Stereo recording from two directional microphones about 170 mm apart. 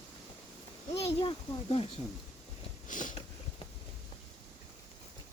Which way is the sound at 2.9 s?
50° left (ahead or behind).